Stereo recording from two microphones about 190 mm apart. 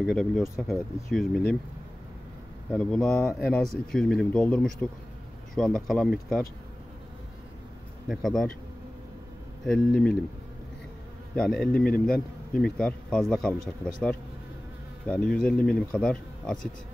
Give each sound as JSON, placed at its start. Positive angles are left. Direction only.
{"t": 0.0, "sound": "speech", "side_deg": 0}
{"t": 2.7, "sound": "speech", "side_deg": 5}
{"t": 8.1, "sound": "speech", "side_deg": 0}
{"t": 9.7, "sound": "speech", "side_deg": 5}
{"t": 11.3, "sound": "speech", "side_deg": 0}
{"t": 11.6, "sound": "a man's voice", "side_deg": 50}
{"t": 12.1, "sound": "speech", "side_deg": 5}
{"t": 15.0, "sound": "speech", "side_deg": 5}